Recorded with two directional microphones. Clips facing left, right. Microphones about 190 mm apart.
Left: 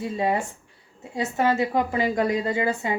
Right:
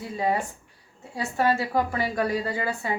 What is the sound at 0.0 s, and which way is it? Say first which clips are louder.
A woman's voice: left 2 dB; 25° left (ahead or behind).